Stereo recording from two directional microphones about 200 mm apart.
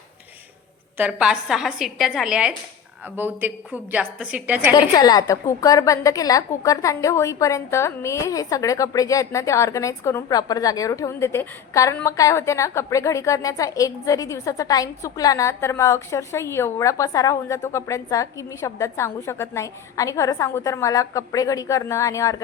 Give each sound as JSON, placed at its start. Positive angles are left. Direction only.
{"t": 0.9, "sound": "a woman's voice", "side_deg": -5}
{"t": 4.7, "sound": "a woman's voice", "side_deg": 20}